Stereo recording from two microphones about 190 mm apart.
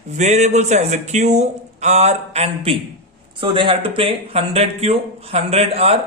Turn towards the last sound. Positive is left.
turn(degrees=-30)  # may be behind; listen again after turning